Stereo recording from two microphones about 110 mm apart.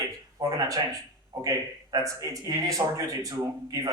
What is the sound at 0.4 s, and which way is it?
Speech, 30° right (ahead or behind).